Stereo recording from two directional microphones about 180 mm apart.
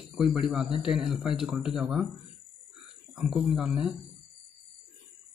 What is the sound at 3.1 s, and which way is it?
Speech, 5° right (ahead or behind).